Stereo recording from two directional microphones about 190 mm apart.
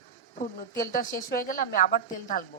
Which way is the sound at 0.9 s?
45° left (ahead or behind).